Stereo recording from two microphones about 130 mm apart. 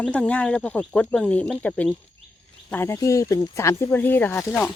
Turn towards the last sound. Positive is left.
turn(degrees=15)  # may be behind; listen again after turning